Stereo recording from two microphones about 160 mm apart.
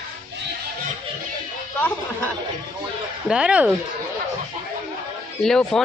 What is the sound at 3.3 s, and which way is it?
Speech, 5° right (ahead or behind).